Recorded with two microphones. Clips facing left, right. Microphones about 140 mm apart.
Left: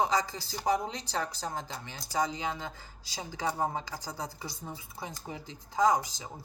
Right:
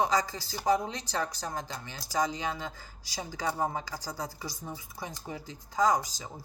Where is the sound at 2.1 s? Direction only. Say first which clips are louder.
Right 1 dB; 25° left (ahead or behind).